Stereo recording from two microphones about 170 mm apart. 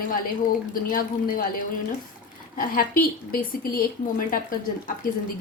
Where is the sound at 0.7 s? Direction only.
55° left (ahead or behind).